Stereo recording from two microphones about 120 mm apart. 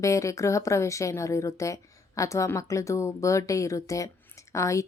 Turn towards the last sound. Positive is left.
turn(degrees=25)  # may be behind; listen again after turning